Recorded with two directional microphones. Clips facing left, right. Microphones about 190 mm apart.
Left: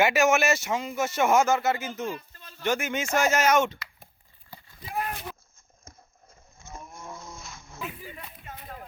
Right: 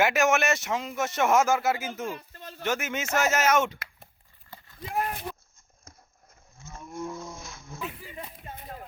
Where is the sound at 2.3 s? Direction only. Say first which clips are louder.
Right 7 dB; 60° right (ahead or behind).